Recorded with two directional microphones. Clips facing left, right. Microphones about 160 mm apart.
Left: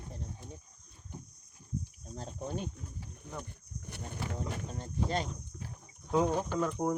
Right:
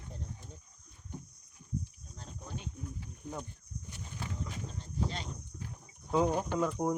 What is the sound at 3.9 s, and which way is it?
Speech, 60° left (ahead or behind).